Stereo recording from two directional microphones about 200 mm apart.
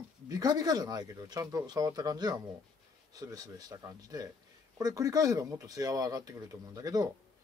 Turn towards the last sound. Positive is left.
turn(degrees=-20)  # may be behind; listen again after turning